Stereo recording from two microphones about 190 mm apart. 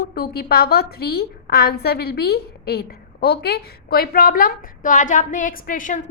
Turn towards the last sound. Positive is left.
turn(degrees=45)  # may be behind; listen again after turning